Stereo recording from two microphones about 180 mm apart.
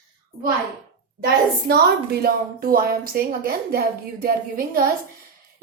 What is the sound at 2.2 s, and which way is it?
A woman's voice, 55° right (ahead or behind).